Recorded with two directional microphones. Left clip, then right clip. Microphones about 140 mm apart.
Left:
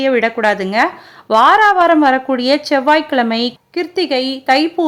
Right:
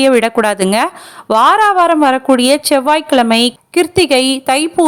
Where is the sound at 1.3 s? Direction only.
25° right (ahead or behind).